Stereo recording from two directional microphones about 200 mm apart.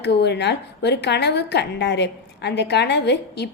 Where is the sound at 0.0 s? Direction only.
60° left (ahead or behind).